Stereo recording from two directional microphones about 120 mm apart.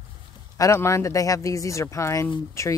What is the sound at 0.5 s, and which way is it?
Speech, 25° left (ahead or behind).